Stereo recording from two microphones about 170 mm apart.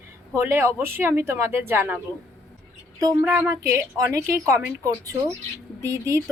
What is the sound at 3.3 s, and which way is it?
Speech, 15° right (ahead or behind).